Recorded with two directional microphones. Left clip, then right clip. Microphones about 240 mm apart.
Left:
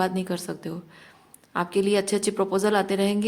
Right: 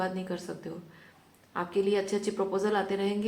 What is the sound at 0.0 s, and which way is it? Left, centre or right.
Speech, left.